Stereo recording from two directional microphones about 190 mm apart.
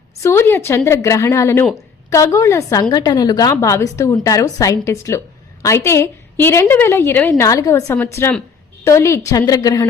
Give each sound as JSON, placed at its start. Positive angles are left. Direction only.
{"t": 0.2, "sound": "a woman's voice", "side_deg": 15}